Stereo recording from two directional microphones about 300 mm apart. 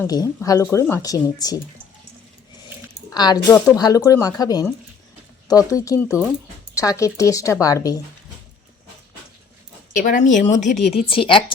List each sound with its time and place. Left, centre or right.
0.0 s speech: centre
3.1 s speech: centre
9.9 s speech: left